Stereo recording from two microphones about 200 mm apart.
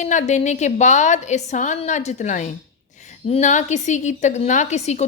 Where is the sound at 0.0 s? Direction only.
35° left (ahead or behind).